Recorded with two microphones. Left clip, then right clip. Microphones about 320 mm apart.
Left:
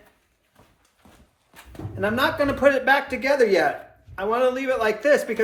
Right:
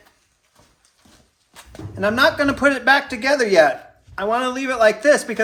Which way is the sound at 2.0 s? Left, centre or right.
Right.